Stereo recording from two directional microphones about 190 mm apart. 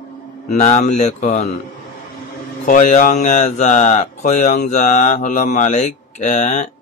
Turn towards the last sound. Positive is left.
turn(degrees=40)  # may be behind; listen again after turning